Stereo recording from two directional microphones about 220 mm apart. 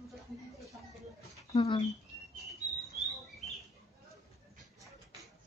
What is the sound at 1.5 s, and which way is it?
Speech, 25° left (ahead or behind).